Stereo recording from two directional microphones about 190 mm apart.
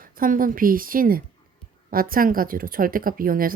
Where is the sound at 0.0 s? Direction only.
45° right (ahead or behind).